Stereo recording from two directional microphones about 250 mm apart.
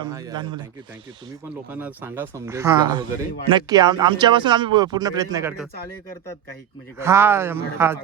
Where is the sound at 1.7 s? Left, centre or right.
Centre.